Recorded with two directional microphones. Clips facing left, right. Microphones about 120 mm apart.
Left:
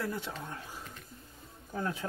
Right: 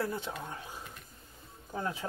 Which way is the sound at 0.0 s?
30° right (ahead or behind).